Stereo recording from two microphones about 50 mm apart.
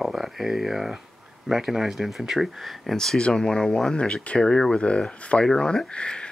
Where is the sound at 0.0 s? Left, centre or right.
Centre.